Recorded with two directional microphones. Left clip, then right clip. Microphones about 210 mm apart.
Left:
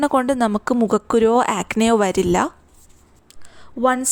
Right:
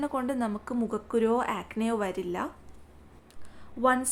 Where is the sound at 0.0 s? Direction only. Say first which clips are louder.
Left 13 dB; 45° left (ahead or behind).